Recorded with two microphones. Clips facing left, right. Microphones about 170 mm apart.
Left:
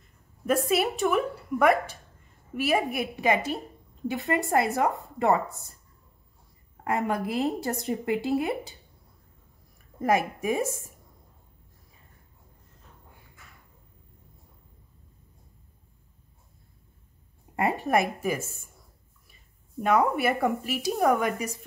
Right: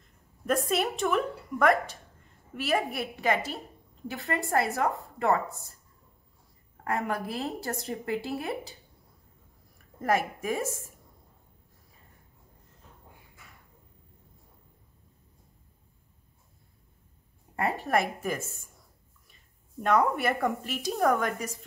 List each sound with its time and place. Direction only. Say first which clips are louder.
0.5 s a woman's voice: left 3 dB; 5° left (ahead or behind)
6.8 s a woman's voice: left 3 dB; 20° left (ahead or behind)
9.9 s a woman's voice: left 3 dB; 15° left (ahead or behind)
17.6 s a woman's voice: left 3 dB; 20° left (ahead or behind)
19.8 s a woman's voice: left 2 dB; 5° left (ahead or behind)